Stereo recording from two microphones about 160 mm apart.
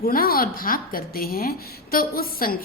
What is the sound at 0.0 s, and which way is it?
A woman's voice, 65° left (ahead or behind).